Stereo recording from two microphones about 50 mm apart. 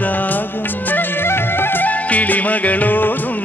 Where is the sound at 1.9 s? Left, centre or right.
Left.